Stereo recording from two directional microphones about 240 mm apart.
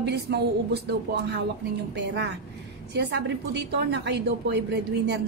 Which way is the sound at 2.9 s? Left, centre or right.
Right.